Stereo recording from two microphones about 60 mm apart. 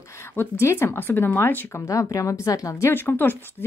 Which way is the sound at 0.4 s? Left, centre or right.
Left.